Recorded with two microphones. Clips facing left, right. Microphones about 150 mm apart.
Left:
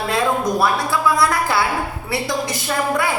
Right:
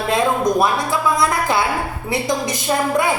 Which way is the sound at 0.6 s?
20° right (ahead or behind).